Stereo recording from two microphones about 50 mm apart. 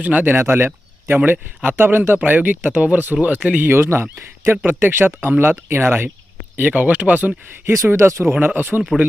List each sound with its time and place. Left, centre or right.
0.0 s speech: right
0.3 s speech: right
1.2 s speech: right
1.7 s speech: right
3.7 s speech: right
4.6 s speech: right
6.6 s speech: right
7.9 s speech: right
8.4 s speech: right